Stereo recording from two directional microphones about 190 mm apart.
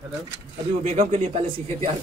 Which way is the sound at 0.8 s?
35° right (ahead or behind).